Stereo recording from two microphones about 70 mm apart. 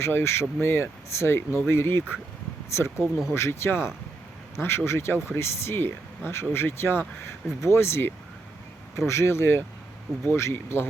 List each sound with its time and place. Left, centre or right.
0.0 s speech: left